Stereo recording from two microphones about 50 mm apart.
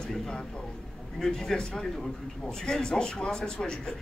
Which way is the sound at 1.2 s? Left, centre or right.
Centre.